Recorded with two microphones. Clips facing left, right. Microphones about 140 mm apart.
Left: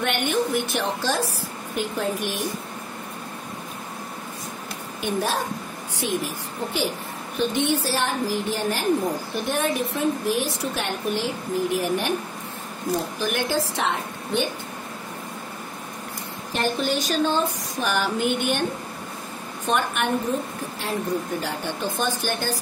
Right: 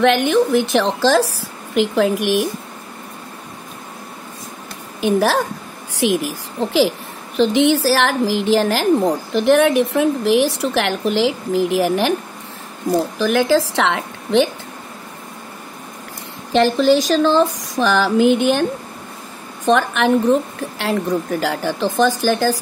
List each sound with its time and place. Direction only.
0.0 s a woman's voice: 90° right
5.0 s a woman's voice: 85° right
13.2 s a woman's voice: 90° right
16.5 s a woman's voice: 90° right
21.4 s a woman's voice: 90° right